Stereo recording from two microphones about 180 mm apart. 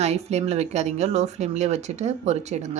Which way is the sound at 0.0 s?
35° right (ahead or behind).